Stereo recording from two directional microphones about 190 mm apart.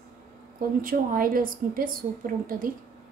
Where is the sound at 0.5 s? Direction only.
50° right (ahead or behind).